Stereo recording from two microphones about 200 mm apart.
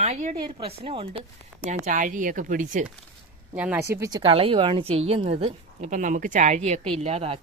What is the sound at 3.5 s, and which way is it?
Speech, 5° right (ahead or behind).